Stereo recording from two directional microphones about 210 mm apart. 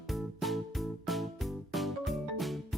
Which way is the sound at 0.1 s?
Centre (ahead or behind).